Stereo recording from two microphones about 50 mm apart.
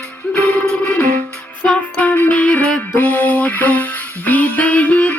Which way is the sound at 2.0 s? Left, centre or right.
Left.